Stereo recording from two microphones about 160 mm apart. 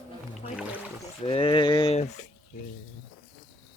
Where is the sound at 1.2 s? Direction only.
35° left (ahead or behind).